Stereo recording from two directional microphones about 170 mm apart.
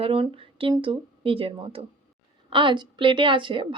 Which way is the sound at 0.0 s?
30° right (ahead or behind).